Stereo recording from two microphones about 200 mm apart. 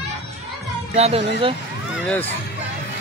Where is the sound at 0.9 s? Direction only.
30° right (ahead or behind).